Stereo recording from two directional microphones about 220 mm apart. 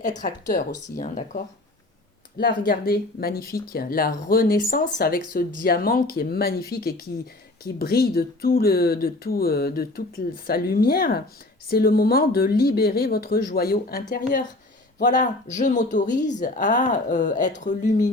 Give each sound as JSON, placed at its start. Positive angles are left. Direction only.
{"t": 0.0, "sound": "speech", "side_deg": 35}
{"t": 2.4, "sound": "speech", "side_deg": 40}